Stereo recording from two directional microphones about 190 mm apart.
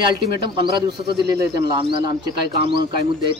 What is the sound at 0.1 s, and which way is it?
Speech, 25° right (ahead or behind).